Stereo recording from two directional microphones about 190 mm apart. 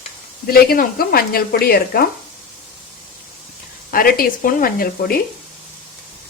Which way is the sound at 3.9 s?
50° left (ahead or behind).